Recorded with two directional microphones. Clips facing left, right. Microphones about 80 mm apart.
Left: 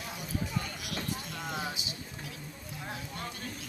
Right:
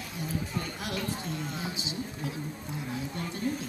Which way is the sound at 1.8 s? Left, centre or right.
Right.